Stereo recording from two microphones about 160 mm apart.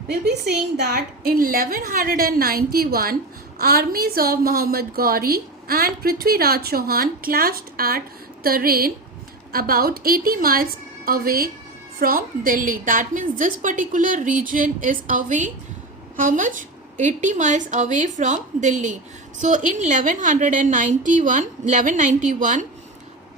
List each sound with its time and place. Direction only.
0.1 s a woman's voice: 80° right; by 22.6 s 55° right (ahead or behind)